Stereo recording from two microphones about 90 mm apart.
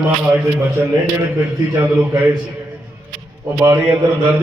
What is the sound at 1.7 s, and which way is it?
Speech, 20° right (ahead or behind).